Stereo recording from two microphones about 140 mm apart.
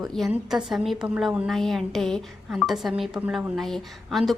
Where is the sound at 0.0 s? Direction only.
Centre (ahead or behind).